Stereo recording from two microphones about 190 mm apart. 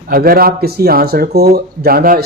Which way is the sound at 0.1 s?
50° right (ahead or behind).